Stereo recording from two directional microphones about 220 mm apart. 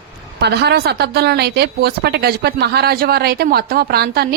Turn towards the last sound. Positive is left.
turn(degrees=-45)  # may be behind; listen again after turning